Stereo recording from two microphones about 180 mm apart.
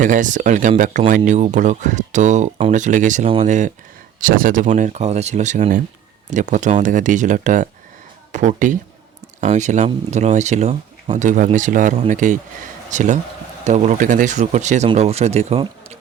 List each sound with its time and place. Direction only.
0.0 s speech: 45° right (ahead or behind)